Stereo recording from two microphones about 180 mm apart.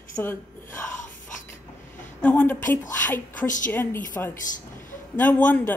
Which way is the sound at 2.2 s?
10° left (ahead or behind).